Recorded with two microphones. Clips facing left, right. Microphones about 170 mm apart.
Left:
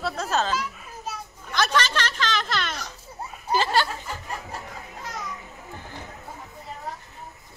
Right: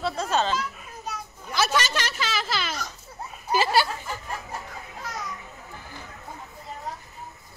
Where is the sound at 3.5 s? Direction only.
10° right (ahead or behind).